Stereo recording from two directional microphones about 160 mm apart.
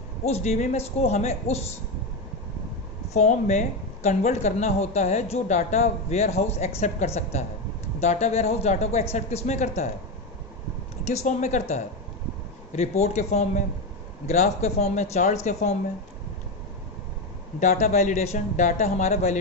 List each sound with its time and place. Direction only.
0.3 s speech: 40° left (ahead or behind)
3.1 s a woman's voice: 45° left (ahead or behind)
11.0 s a woman's voice: 45° left (ahead or behind)
12.7 s a woman's voice: 45° left (ahead or behind)
17.6 s a woman's voice: 45° left (ahead or behind)